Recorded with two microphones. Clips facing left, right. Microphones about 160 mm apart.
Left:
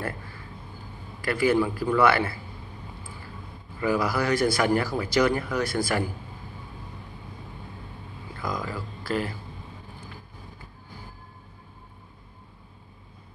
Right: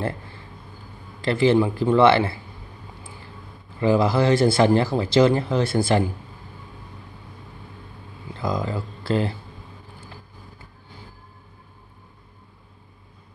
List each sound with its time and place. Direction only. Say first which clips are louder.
0.0 s a sound: right 5 dB; 25° right (ahead or behind)
1.2 s speech: right 4 dB; 25° right (ahead or behind)
3.8 s speech: right 6 dB; 25° right (ahead or behind)
8.3 s speech: right 6 dB; 25° right (ahead or behind)